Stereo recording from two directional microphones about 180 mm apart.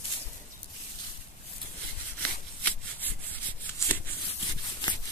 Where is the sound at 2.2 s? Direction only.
10° left (ahead or behind).